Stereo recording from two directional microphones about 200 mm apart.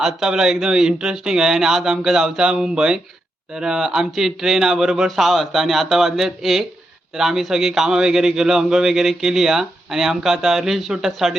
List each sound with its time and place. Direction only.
0.0 s a man's voice: centre (ahead or behind)